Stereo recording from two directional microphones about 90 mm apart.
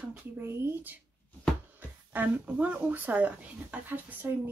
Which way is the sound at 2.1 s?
20° right (ahead or behind).